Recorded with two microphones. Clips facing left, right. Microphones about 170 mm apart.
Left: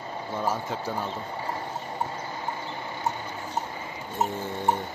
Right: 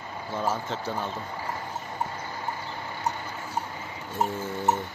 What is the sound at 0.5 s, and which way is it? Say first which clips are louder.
Speech: even; 10° left (ahead or behind).